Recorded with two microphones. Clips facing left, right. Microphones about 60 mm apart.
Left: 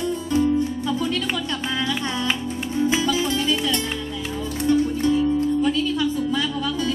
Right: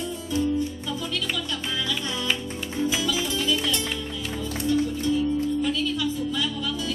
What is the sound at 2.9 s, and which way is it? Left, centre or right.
Music, left.